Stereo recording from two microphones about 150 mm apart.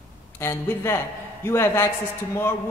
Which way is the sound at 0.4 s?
15° left (ahead or behind).